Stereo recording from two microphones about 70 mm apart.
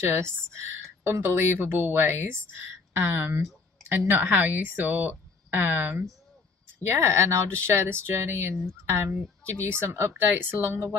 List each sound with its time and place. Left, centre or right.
0.0 s speech: right
6.9 s speech: right